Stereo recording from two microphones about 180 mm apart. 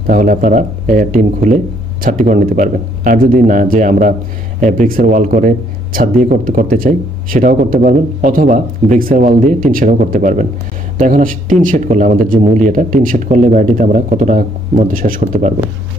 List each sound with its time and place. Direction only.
0.0 s a man's voice: 50° right (ahead or behind)